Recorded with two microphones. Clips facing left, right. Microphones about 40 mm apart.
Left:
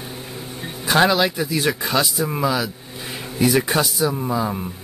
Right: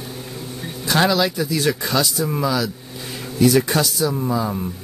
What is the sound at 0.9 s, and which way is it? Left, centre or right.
Speech, left.